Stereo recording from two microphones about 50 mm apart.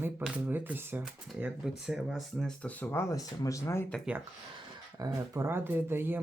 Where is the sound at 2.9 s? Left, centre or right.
Left.